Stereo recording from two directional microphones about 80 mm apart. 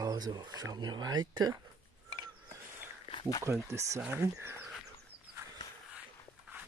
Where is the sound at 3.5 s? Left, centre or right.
Right.